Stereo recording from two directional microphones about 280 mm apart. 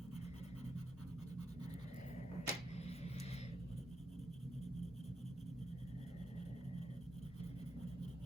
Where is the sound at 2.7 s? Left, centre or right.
Left.